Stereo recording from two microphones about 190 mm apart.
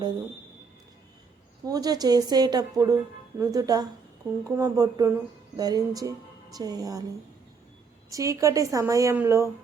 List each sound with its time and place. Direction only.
1.6 s a woman's voice: 20° right (ahead or behind)
8.1 s a woman's voice: 15° right (ahead or behind)